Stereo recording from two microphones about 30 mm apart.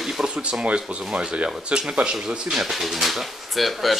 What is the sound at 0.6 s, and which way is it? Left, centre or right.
Speech, right.